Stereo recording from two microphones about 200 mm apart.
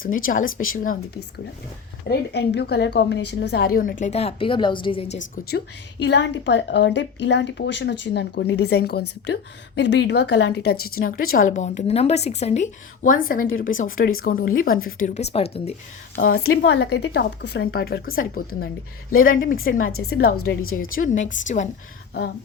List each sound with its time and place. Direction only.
0.3 s speech: 45° left (ahead or behind)
2.0 s a woman's voice: 55° left (ahead or behind)
4.1 s a woman's voice: 30° left (ahead or behind)
5.5 s a woman's voice: 55° left (ahead or behind)
15.0 s speech: 35° left (ahead or behind)
16.1 s speech: 50° left (ahead or behind)
16.4 s a woman's voice: 90° left
16.7 s speech: 55° left (ahead or behind)
19.8 s a woman's voice: 90° left
20.1 s speech: 50° left (ahead or behind)
20.4 s a woman's voice: 90° left
20.7 s speech: 45° left (ahead or behind)